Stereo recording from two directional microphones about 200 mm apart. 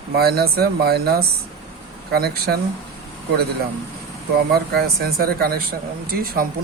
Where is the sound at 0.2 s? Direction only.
50° right (ahead or behind).